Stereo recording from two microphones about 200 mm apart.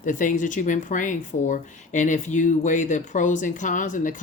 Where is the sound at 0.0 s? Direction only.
40° left (ahead or behind).